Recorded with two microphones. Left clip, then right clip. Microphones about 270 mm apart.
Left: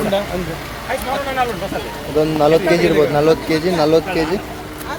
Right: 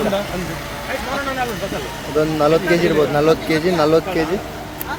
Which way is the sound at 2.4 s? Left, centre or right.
Centre.